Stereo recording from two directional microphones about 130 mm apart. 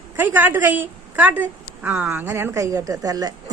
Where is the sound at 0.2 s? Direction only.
15° right (ahead or behind).